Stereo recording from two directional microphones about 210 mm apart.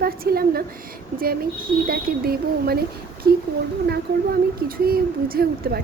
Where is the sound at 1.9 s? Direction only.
45° right (ahead or behind).